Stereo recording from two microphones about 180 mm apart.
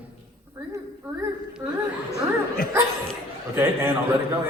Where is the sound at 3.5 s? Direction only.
10° right (ahead or behind).